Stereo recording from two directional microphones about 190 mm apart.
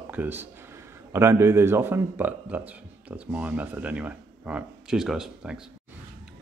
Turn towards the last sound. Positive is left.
turn(degrees=-5)  # may be behind; listen again after turning